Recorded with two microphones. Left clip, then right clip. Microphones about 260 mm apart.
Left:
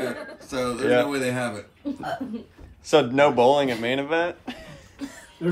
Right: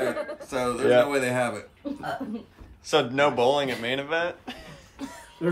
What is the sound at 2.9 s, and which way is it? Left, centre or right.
Speech, centre.